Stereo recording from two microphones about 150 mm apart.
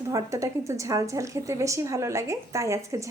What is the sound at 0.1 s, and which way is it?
A woman's voice, 20° right (ahead or behind).